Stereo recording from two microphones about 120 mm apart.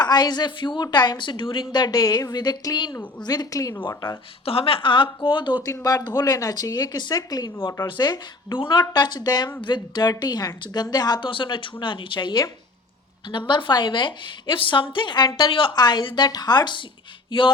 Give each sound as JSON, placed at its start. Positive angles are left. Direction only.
{"t": 0.0, "sound": "speech", "side_deg": 35}
{"t": 3.8, "sound": "speech", "side_deg": 40}
{"t": 5.6, "sound": "speech", "side_deg": 30}
{"t": 13.5, "sound": "speech", "side_deg": 40}